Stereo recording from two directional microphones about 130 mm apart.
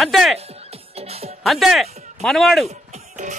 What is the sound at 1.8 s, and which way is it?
Music, 55° right (ahead or behind).